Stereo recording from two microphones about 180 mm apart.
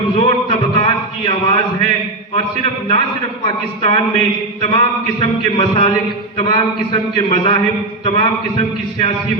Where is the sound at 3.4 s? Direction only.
30° left (ahead or behind).